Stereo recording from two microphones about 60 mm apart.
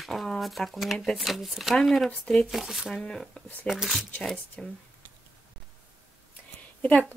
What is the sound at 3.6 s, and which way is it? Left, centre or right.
Speech, centre.